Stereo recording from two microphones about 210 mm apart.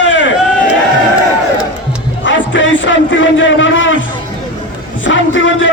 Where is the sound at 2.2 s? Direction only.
65° left (ahead or behind).